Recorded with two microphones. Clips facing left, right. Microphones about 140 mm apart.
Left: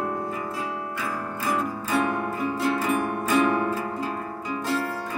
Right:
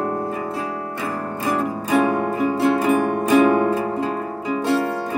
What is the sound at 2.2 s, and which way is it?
Music, 25° right (ahead or behind).